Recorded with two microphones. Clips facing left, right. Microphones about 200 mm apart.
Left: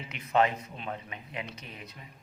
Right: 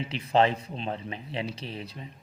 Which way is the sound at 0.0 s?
30° right (ahead or behind).